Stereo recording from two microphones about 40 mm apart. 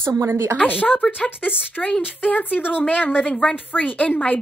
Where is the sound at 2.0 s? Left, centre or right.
Left.